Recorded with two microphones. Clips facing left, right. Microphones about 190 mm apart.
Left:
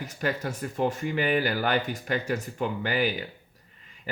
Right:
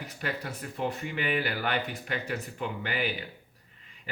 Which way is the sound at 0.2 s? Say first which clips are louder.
Left 6 dB; 40° left (ahead or behind).